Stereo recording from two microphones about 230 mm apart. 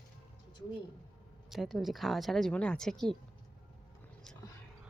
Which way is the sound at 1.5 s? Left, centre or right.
Centre.